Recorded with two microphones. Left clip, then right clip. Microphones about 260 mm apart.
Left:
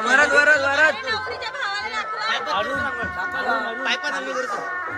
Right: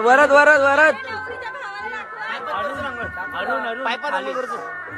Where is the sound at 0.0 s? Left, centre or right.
Centre.